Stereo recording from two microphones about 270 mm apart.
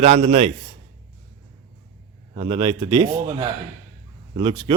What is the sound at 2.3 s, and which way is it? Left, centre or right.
A man's voice, centre.